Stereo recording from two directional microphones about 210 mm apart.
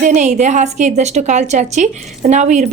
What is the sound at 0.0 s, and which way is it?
A woman's voice, 35° right (ahead or behind).